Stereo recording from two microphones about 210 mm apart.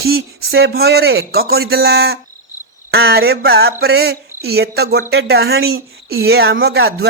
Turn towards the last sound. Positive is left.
turn(degrees=-50)  # may be behind; listen again after turning